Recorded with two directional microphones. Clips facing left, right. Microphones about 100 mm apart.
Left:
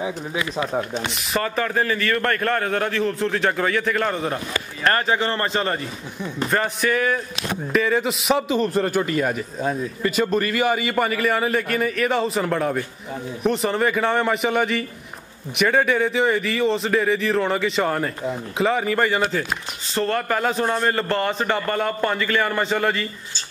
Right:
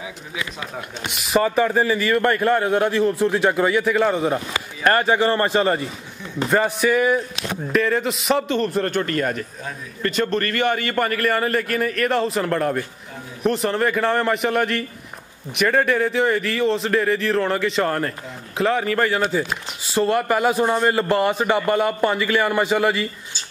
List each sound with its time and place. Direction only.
1.3 s a man's voice: 10° right (ahead or behind)
7.7 s a man's voice: centre (ahead or behind)
19.9 s a man's voice: 10° right (ahead or behind)